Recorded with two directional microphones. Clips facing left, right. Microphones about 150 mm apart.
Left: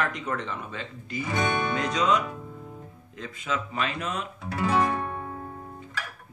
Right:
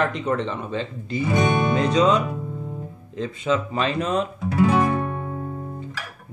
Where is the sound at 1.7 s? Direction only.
30° right (ahead or behind).